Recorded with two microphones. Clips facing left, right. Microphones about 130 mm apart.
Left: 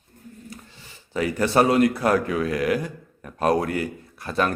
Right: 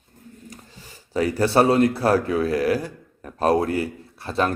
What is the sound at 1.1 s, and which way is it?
A man's voice, 35° right (ahead or behind).